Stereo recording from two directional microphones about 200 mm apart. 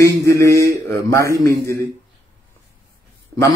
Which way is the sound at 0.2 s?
15° left (ahead or behind).